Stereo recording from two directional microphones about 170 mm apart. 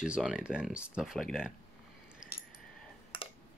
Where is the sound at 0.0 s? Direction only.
5° right (ahead or behind).